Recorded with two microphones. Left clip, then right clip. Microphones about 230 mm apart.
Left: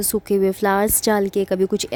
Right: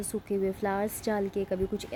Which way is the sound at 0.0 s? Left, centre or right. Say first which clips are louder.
Left 12 dB; left.